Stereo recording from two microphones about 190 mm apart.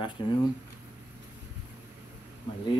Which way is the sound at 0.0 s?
25° left (ahead or behind).